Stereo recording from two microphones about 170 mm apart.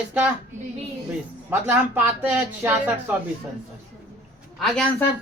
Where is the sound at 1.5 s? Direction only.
10° right (ahead or behind).